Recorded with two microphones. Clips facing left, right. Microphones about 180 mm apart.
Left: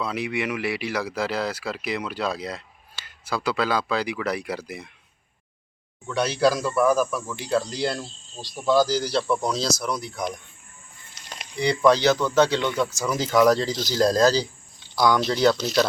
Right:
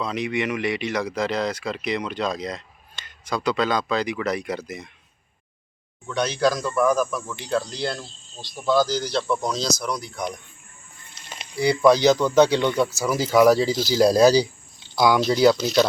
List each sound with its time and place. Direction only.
0.0 s speech: 10° left (ahead or behind)
6.1 s speech: 5° left (ahead or behind)